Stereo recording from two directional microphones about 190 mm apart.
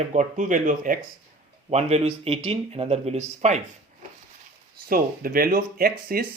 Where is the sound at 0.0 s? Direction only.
40° right (ahead or behind).